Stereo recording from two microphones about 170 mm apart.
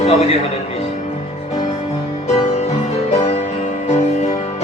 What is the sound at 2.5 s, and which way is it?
Music, 40° left (ahead or behind).